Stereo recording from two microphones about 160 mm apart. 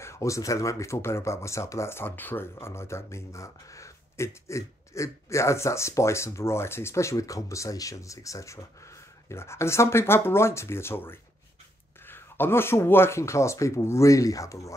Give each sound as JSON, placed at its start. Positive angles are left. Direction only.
{"t": 0.0, "sound": "speech", "side_deg": 20}